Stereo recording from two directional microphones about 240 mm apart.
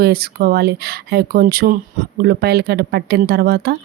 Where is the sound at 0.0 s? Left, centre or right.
Right.